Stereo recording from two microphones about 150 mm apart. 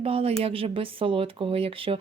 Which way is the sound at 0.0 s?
40° right (ahead or behind).